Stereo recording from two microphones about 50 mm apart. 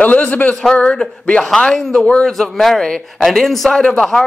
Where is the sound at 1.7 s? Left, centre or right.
Centre.